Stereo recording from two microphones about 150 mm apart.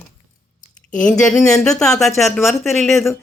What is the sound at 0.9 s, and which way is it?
A woman's voice, 5° left (ahead or behind).